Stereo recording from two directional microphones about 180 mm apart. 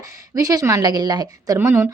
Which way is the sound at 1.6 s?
10° right (ahead or behind).